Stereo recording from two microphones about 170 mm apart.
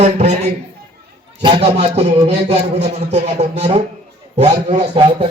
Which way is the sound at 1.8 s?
40° right (ahead or behind).